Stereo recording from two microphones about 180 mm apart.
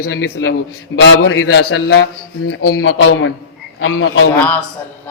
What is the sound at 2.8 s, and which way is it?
A man's voice, 90° left.